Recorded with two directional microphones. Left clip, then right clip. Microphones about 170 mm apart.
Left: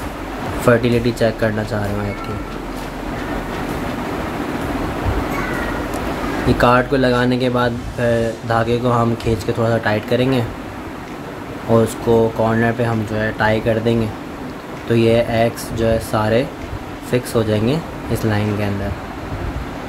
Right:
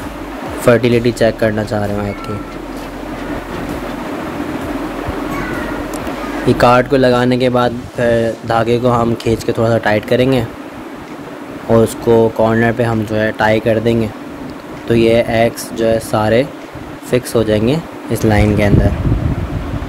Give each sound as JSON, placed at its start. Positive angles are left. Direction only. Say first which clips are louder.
{"t": 0.7, "sound": "speech", "louder": "right 4 dB", "side_deg": -40}
{"t": 6.6, "sound": "speech", "louder": "right 4 dB", "side_deg": -40}
{"t": 11.7, "sound": "speech", "louder": "right 4 dB", "side_deg": -35}